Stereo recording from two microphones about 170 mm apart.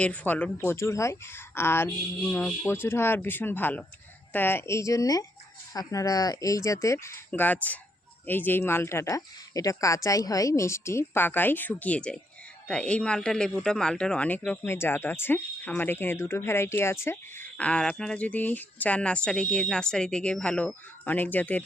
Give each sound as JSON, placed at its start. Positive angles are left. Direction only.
{"t": 0.0, "sound": "a man's voice", "side_deg": 10}